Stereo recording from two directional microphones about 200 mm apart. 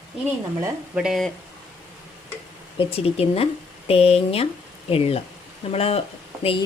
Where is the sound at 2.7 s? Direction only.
30° left (ahead or behind).